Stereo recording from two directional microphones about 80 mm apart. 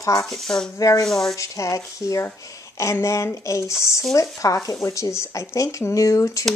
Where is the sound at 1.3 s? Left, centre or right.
Left.